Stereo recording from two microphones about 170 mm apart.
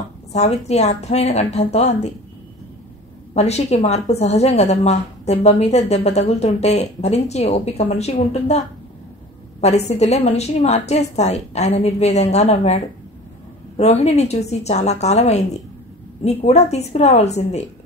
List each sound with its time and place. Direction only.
0.3 s a woman's voice: 40° left (ahead or behind)
3.3 s a woman's voice: 40° left (ahead or behind)